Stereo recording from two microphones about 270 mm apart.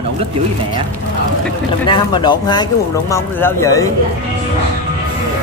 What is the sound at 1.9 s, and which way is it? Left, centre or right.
A woman's voice, centre.